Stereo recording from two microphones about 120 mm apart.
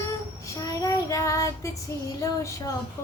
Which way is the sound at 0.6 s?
25° left (ahead or behind).